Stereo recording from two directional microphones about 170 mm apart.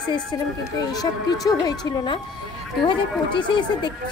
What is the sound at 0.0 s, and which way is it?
A woman's voice, 25° left (ahead or behind).